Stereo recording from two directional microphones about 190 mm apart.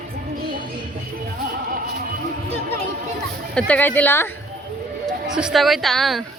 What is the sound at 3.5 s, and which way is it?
Speech, 5° left (ahead or behind).